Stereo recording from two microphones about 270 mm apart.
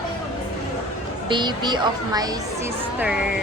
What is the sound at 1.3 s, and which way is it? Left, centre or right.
Speech, centre.